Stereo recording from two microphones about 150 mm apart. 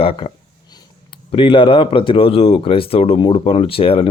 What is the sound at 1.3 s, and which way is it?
Speech, 35° left (ahead or behind).